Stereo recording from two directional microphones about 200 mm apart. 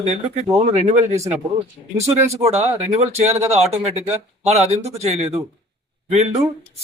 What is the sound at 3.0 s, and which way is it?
Speech, 30° right (ahead or behind).